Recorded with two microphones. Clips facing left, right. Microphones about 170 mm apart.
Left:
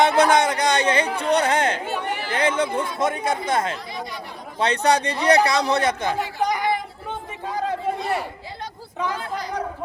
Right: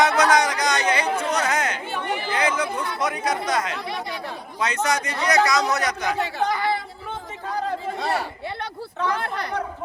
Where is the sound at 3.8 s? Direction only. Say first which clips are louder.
Right 2 dB; 70° right (ahead or behind).